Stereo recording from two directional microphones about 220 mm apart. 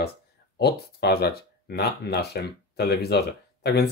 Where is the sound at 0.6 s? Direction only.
45° left (ahead or behind).